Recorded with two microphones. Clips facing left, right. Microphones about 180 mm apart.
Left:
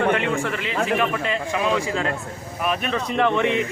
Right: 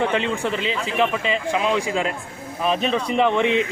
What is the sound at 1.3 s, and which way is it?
A man's voice, 20° right (ahead or behind).